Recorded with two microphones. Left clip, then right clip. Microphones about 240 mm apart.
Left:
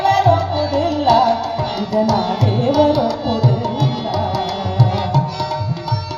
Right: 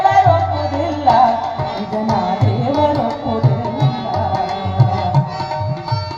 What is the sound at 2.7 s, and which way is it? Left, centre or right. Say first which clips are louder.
Tabla: left 1 dB; left.